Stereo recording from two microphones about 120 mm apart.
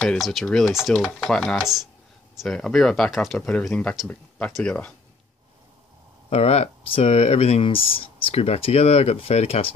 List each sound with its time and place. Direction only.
0.0 s speech: 5° left (ahead or behind)
6.3 s speech: 60° left (ahead or behind)